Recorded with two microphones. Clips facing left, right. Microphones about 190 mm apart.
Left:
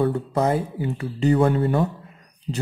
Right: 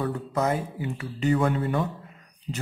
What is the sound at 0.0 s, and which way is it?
Speech, 30° left (ahead or behind).